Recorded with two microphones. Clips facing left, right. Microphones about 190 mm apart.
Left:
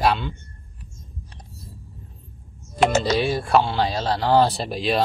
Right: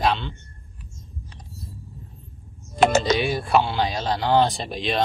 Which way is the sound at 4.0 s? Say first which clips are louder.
Left 2 dB; 5° left (ahead or behind).